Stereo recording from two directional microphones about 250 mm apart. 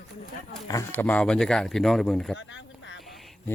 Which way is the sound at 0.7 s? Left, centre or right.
Centre.